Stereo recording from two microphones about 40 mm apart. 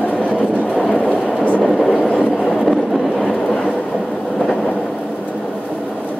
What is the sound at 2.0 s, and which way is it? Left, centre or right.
Train, centre.